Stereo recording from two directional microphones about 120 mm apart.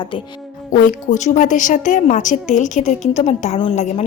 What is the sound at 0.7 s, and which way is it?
A woman's voice, 90° left.